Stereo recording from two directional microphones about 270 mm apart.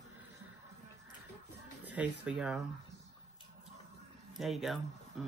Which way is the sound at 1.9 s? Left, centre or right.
Centre.